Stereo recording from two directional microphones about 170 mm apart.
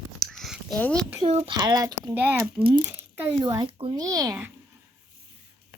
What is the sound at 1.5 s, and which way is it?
Speech, 25° right (ahead or behind).